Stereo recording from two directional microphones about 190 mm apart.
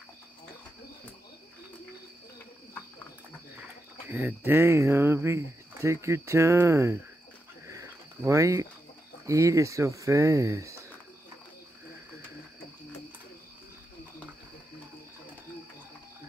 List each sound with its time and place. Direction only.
4.1 s speech: 10° right (ahead or behind)
7.6 s a sound: 15° right (ahead or behind)
9.2 s speech: 15° right (ahead or behind)